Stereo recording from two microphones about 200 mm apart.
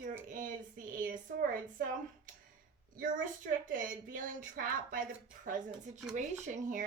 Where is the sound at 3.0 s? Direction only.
40° right (ahead or behind).